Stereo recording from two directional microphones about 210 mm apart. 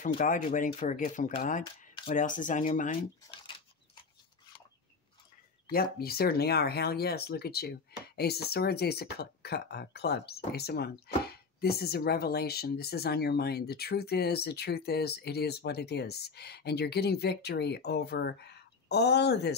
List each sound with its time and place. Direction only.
0.2 s speech: 40° left (ahead or behind)
5.7 s speech: 45° left (ahead or behind)